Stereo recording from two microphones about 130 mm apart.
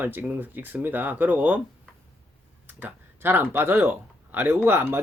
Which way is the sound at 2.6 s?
15° right (ahead or behind).